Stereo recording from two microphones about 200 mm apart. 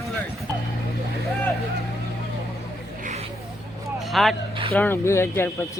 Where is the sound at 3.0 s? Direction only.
30° right (ahead or behind).